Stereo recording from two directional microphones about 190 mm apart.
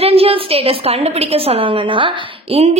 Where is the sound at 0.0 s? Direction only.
30° right (ahead or behind).